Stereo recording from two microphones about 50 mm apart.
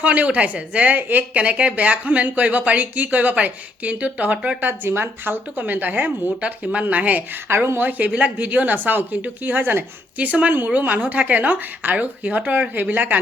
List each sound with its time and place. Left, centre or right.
0.0 s speech: right
4.8 s speech: right
6.4 s speech: right
7.4 s speech: right
10.2 s speech: right